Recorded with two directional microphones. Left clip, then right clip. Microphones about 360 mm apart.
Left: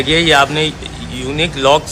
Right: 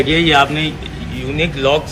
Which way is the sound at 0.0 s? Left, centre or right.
Left.